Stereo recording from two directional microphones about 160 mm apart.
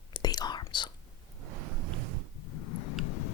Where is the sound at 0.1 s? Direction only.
25° left (ahead or behind).